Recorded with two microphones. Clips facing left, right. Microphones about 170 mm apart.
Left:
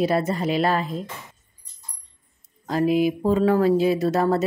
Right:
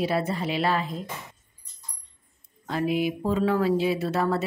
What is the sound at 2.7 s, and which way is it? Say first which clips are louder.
Speech: left 5 dB; 40° left (ahead or behind).